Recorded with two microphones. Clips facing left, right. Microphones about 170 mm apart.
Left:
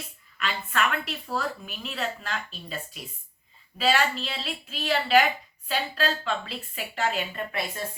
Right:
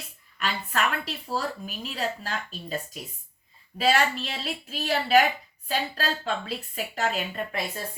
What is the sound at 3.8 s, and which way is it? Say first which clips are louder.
A woman's voice: right 1 dB; 40° right (ahead or behind).